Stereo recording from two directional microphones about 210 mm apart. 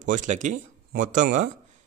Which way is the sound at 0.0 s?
35° right (ahead or behind).